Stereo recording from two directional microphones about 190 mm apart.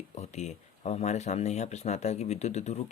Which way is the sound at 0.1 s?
35° left (ahead or behind).